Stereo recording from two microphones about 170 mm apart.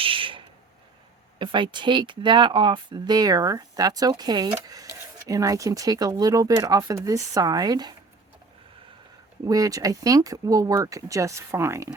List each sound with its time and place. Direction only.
0.0 s a sound: 30° right (ahead or behind)
1.4 s speech: 30° right (ahead or behind)
9.4 s speech: 20° right (ahead or behind)